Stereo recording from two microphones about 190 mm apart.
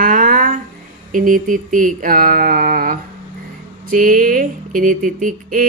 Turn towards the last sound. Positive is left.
turn(degrees=-45)  # may be behind; listen again after turning